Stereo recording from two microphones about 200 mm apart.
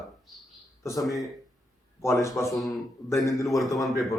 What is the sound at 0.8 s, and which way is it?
Speech, 15° left (ahead or behind).